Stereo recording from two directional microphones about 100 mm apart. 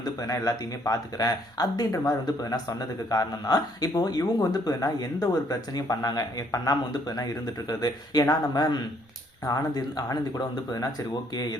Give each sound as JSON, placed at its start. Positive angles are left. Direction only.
{"t": 0.0, "sound": "speech", "side_deg": 35}